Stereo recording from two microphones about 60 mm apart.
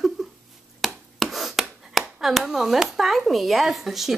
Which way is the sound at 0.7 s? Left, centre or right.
Centre.